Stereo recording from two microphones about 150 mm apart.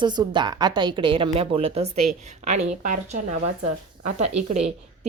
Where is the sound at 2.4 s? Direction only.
55° right (ahead or behind).